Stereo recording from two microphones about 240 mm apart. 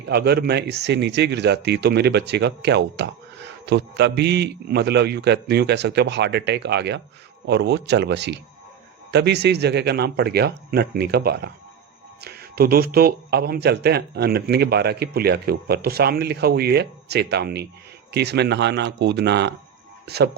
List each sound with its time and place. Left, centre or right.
0.1 s speech: right